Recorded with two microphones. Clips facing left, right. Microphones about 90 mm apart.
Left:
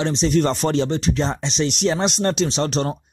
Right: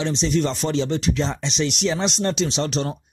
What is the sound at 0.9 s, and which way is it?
Speech, 35° left (ahead or behind).